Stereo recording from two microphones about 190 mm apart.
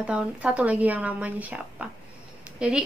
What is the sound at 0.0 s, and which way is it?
Speech, 5° right (ahead or behind).